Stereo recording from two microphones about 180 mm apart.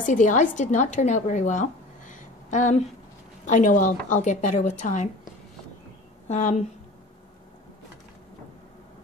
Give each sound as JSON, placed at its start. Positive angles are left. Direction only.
{"t": 0.0, "sound": "a woman's voice", "side_deg": 45}
{"t": 6.2, "sound": "a woman's voice", "side_deg": 40}